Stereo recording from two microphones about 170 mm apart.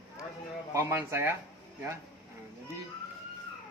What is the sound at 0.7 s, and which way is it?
Speech, 15° right (ahead or behind).